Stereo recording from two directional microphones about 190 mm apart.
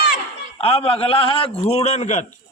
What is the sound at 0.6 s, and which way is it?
A man's voice, 30° left (ahead or behind).